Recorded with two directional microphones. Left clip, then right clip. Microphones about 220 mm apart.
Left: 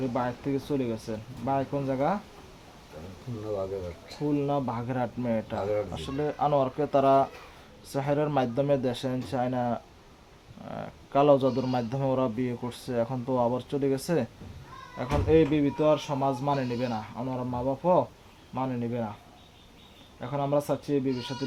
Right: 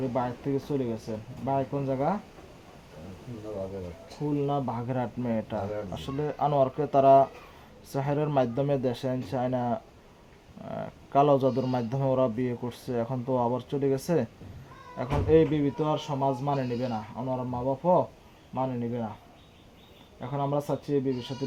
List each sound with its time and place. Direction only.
0.1 s speech: 15° right (ahead or behind)
4.4 s speech: 15° right (ahead or behind)
20.1 s speech: 15° right (ahead or behind)